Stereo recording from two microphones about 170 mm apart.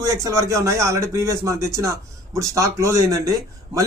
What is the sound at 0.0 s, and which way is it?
A man's voice, 20° right (ahead or behind).